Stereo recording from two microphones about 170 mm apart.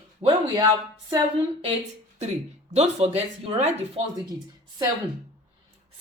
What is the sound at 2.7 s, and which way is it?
Speech, 40° right (ahead or behind).